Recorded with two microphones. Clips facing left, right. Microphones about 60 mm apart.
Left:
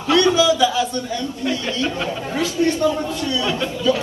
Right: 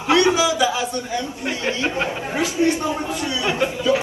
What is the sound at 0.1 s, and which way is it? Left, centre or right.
A man's voice, right.